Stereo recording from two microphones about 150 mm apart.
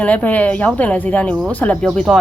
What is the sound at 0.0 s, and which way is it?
Speech, 10° left (ahead or behind).